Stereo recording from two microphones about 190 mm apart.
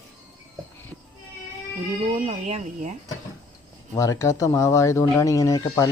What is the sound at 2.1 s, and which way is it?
Speech, 35° right (ahead or behind).